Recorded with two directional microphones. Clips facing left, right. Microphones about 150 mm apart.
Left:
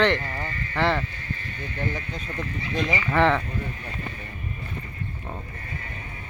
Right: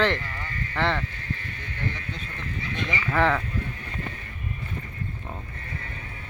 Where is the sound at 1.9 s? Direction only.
40° left (ahead or behind).